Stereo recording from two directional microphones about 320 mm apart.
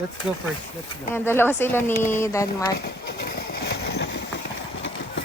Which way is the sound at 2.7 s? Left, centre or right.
Left.